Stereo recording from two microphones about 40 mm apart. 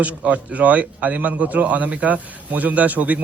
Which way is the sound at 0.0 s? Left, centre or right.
Right.